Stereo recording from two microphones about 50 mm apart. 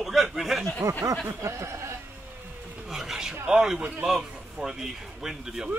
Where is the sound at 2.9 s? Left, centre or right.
Centre.